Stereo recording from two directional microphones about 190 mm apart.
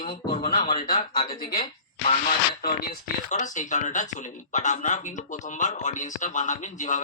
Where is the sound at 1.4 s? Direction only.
50° left (ahead or behind).